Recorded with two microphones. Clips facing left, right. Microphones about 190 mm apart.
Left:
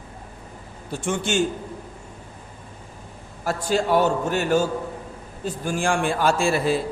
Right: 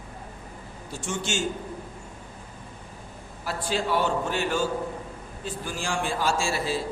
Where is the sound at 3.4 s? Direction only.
45° left (ahead or behind).